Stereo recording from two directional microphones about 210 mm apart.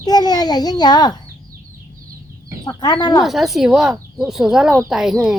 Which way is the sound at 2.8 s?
20° left (ahead or behind).